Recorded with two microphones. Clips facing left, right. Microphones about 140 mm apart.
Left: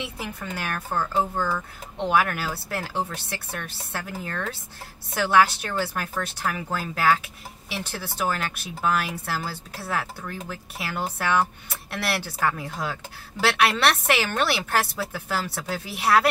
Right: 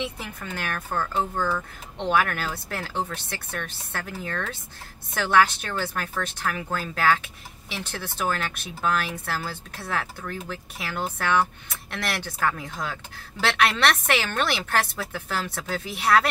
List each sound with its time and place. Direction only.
0.0 s speech: 10° left (ahead or behind)